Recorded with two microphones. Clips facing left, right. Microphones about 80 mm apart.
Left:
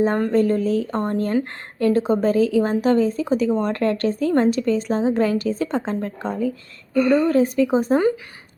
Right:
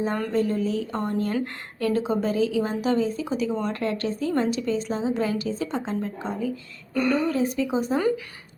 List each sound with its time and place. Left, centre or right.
0.3 s a woman's voice: left